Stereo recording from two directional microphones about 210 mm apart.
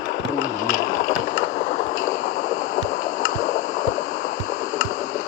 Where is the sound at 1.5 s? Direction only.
40° left (ahead or behind).